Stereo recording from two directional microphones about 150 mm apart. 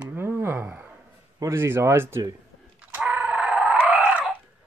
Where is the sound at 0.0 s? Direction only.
15° right (ahead or behind).